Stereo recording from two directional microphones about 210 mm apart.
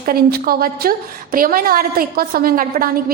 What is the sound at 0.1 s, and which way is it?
A woman's voice, 45° right (ahead or behind).